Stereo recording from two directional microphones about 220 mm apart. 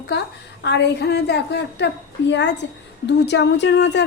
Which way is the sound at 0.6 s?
50° left (ahead or behind).